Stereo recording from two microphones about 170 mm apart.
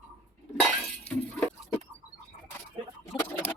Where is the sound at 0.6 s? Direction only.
10° left (ahead or behind).